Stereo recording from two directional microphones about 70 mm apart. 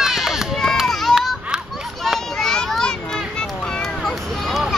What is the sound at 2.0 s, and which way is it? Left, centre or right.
Children playing, centre.